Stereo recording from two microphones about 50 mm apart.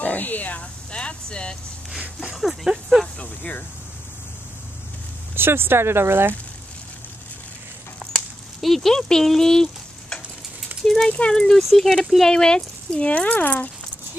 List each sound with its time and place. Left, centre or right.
0.0 s speech: left
0.9 s speech: left
2.3 s speech: centre
5.3 s speech: right
8.5 s stir: centre
10.7 s a sound: right
11.1 s speech: left
11.3 s speech: centre; by 13.7 s left